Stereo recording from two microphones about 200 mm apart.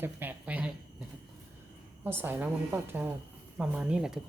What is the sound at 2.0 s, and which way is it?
A woman's voice, 10° right (ahead or behind).